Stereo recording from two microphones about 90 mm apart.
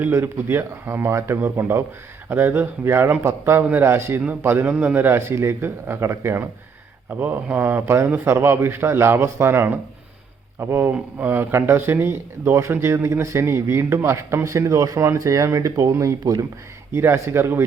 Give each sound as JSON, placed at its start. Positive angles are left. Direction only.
{"t": 0.0, "sound": "a man's voice", "side_deg": -25}
{"t": 4.7, "sound": "a man's voice", "side_deg": -10}
{"t": 4.9, "sound": "a man's voice", "side_deg": -25}
{"t": 7.1, "sound": "a man's voice", "side_deg": -15}